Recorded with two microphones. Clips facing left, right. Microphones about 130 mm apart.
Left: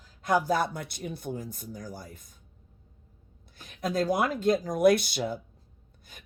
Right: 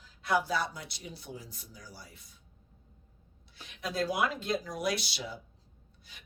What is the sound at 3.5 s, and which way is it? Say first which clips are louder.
Speech: left 6 dB; 45° left (ahead or behind).